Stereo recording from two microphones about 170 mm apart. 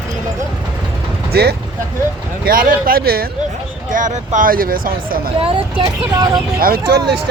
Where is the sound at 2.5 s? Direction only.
55° right (ahead or behind).